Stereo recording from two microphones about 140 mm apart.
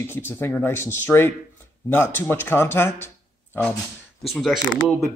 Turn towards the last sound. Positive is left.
turn(degrees=0)  # may be behind; listen again after turning